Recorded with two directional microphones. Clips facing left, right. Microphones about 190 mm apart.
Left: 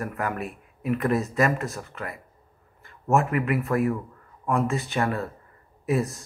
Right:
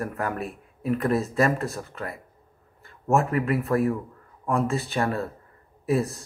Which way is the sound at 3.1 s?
35° right (ahead or behind).